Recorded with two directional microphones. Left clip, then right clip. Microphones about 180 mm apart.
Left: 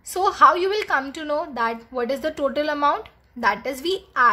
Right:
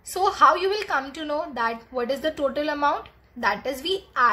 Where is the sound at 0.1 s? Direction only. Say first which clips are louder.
Left 2 dB; 15° left (ahead or behind).